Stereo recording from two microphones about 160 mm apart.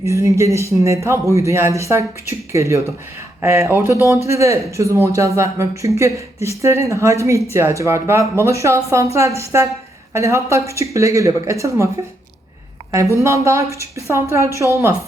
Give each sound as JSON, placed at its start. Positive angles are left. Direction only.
{"t": 0.0, "sound": "speech", "side_deg": -20}
{"t": 3.9, "sound": "speech", "side_deg": 20}
{"t": 4.3, "sound": "speech", "side_deg": -20}
{"t": 12.9, "sound": "speech", "side_deg": -20}